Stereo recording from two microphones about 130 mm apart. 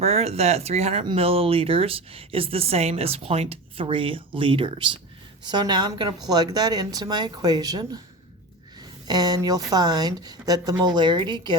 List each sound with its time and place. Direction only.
0.0 s speech: 55° right (ahead or behind); by 7.9 s 30° right (ahead or behind)
9.0 s speech: 30° right (ahead or behind)